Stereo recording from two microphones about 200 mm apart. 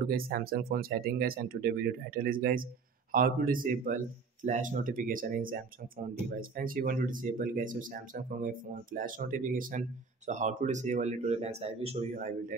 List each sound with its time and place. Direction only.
0.0 s speech: 45° right (ahead or behind)